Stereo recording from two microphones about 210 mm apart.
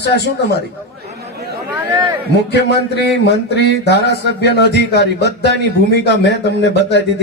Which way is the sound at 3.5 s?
55° left (ahead or behind).